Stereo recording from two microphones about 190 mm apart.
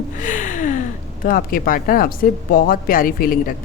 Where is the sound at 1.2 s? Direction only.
45° left (ahead or behind).